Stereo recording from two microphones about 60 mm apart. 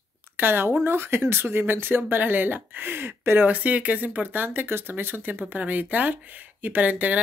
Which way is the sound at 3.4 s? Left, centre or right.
Right.